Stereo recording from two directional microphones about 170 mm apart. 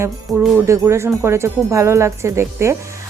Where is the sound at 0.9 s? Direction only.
15° right (ahead or behind).